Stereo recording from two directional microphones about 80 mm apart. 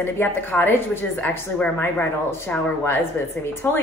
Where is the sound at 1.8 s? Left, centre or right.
Left.